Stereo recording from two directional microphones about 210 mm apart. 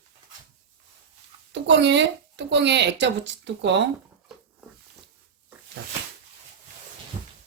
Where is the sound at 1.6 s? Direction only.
55° right (ahead or behind).